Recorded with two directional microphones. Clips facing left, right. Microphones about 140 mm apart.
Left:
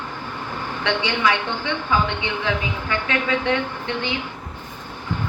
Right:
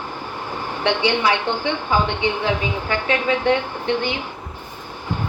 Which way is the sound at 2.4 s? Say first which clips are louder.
Right 3 dB; 30° right (ahead or behind).